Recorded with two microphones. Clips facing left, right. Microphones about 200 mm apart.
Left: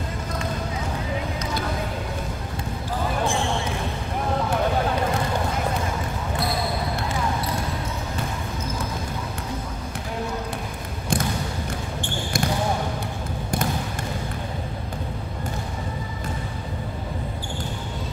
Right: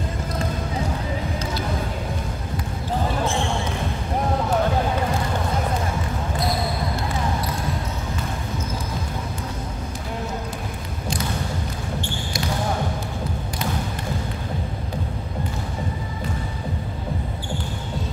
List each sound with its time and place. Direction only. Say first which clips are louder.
12.0 s basketball bounce: left 2 dB; 50° left (ahead or behind)